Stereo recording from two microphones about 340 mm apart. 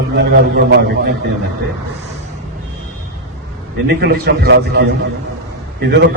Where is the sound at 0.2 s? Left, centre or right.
Right.